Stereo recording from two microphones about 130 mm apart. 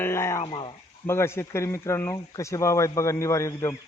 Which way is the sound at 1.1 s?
20° left (ahead or behind).